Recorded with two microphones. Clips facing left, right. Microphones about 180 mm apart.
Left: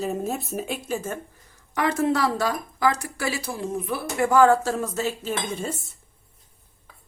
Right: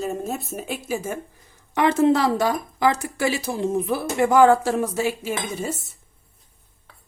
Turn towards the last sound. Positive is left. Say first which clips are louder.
# right 1 dB
turn(degrees=-5)  # may be behind; listen again after turning